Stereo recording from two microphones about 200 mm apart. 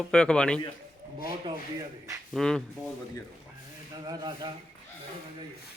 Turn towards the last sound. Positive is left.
turn(degrees=-20)  # may be behind; listen again after turning